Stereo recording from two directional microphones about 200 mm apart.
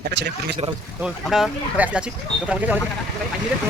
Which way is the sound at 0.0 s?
55° right (ahead or behind).